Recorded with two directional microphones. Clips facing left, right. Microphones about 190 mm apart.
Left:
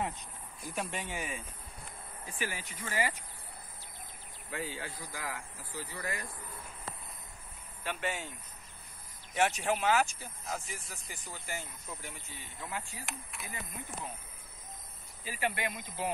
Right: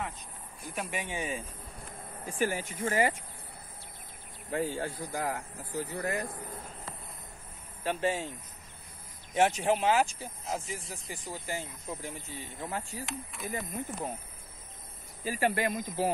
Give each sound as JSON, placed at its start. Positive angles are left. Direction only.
{"t": 0.9, "sound": "speech", "side_deg": -15}
{"t": 2.2, "sound": "speech", "side_deg": -45}
{"t": 4.5, "sound": "speech", "side_deg": -45}
{"t": 7.8, "sound": "speech", "side_deg": -30}
{"t": 9.3, "sound": "speech", "side_deg": -20}
{"t": 12.6, "sound": "speech", "side_deg": -40}
{"t": 13.0, "sound": "speech", "side_deg": 5}
{"t": 13.5, "sound": "speech", "side_deg": -45}
{"t": 15.2, "sound": "speech", "side_deg": -45}